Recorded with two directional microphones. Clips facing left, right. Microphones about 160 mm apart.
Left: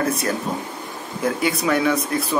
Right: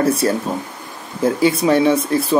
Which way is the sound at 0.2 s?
30° right (ahead or behind).